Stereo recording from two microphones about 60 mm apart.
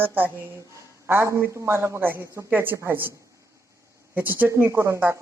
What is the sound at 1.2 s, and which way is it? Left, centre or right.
A woman's voice, right.